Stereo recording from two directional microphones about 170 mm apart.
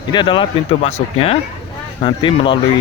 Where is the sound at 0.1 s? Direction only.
25° left (ahead or behind).